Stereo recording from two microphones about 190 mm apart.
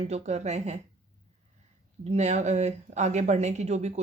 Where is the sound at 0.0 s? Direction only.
35° right (ahead or behind).